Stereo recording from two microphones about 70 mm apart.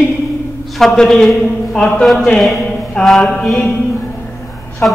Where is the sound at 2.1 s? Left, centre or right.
Centre.